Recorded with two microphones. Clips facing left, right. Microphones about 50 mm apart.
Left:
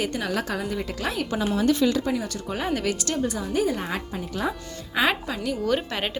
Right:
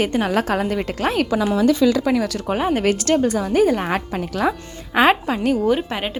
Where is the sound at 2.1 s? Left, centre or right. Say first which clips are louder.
Right 8 dB; right.